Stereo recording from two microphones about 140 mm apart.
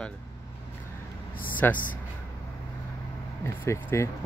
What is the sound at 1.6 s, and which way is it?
Speech, 15° left (ahead or behind).